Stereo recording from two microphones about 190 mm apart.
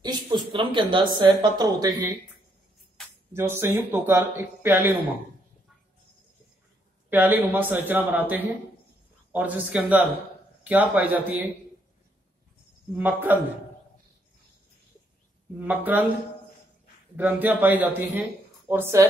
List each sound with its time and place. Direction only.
0.0 s a sound: 25° right (ahead or behind)
1.1 s a woman's voice: 20° right (ahead or behind)
3.3 s a man's voice: 15° right (ahead or behind)
7.1 s a man's voice: 10° right (ahead or behind)
12.9 s a man's voice: 10° right (ahead or behind)
15.6 s a man's voice: 10° right (ahead or behind)
17.2 s a man's voice: 10° right (ahead or behind)